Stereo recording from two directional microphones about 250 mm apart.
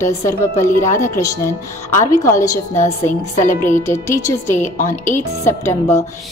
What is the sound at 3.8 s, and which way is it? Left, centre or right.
A woman's voice, centre.